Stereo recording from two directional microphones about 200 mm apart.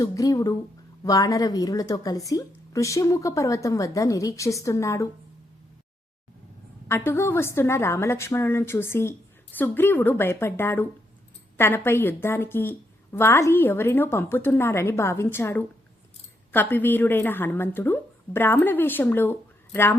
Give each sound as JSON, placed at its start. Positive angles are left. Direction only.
{"t": 0.0, "sound": "a woman's voice", "side_deg": 15}
{"t": 6.8, "sound": "a woman's voice", "side_deg": 10}